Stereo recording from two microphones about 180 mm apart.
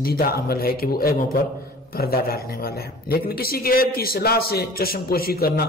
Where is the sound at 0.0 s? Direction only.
55° left (ahead or behind).